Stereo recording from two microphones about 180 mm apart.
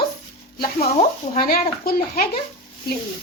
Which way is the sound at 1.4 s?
55° left (ahead or behind).